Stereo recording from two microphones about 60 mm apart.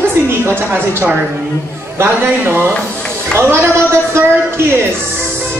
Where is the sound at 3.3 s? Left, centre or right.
Right.